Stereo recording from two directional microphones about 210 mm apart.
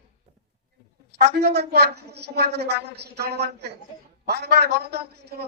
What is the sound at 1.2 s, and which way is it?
A woman's voice, 50° right (ahead or behind).